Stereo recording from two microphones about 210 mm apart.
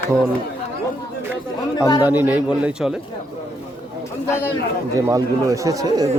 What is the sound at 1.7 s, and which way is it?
Speech, 15° left (ahead or behind).